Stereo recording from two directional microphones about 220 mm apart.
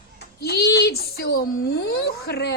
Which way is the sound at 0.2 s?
45° left (ahead or behind).